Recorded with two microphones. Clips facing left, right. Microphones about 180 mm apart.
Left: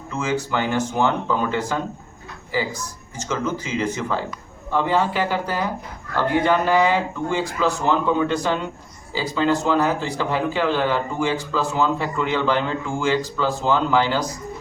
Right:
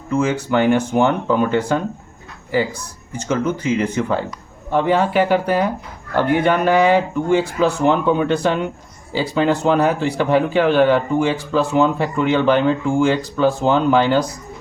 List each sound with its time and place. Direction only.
0.3 s a man's voice: 60° right (ahead or behind)
3.2 s a man's voice: 55° right (ahead or behind)